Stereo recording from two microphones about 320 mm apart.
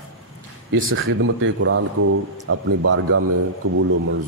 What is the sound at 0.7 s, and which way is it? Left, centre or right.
A man's voice, right.